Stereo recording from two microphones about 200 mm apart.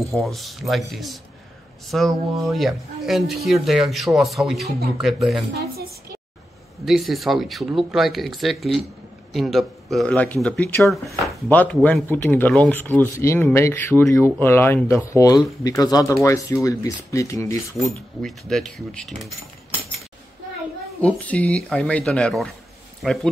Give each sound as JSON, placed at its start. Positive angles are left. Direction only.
{"t": 0.1, "sound": "speech", "side_deg": 0}
{"t": 5.5, "sound": "a sound", "side_deg": -50}
{"t": 6.8, "sound": "speech", "side_deg": 0}
{"t": 17.7, "sound": "speech", "side_deg": 0}
{"t": 21.0, "sound": "speech", "side_deg": 5}